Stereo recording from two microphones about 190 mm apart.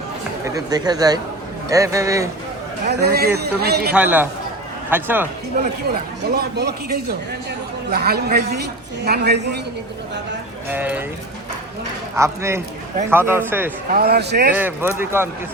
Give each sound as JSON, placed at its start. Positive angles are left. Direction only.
{"t": 0.4, "sound": "speech", "side_deg": -20}
{"t": 2.8, "sound": "a man's voice", "side_deg": -55}
{"t": 3.9, "sound": "speech", "side_deg": -10}
{"t": 5.9, "sound": "a man's voice", "side_deg": -55}
{"t": 10.7, "sound": "speech", "side_deg": -10}
{"t": 12.1, "sound": "speech", "side_deg": -15}
{"t": 13.9, "sound": "a man's voice", "side_deg": -55}
{"t": 14.5, "sound": "speech", "side_deg": -10}